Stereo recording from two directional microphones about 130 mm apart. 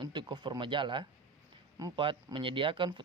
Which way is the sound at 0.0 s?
35° right (ahead or behind).